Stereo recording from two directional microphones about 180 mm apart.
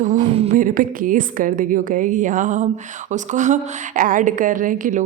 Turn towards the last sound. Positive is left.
turn(degrees=-45)  # may be behind; listen again after turning